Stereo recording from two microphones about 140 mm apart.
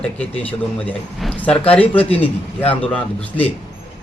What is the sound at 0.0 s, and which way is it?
A man's voice, 10° left (ahead or behind).